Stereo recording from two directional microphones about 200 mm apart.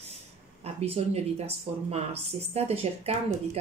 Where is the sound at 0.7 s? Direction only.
30° right (ahead or behind).